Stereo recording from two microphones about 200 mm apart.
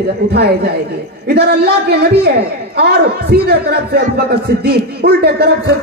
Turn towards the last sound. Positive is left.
turn(degrees=-55)  # may be behind; listen again after turning